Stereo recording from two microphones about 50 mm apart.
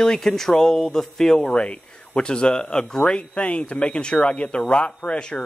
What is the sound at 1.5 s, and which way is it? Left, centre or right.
Speech, left.